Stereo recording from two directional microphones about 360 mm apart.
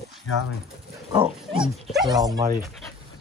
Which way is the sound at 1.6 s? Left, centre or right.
Centre.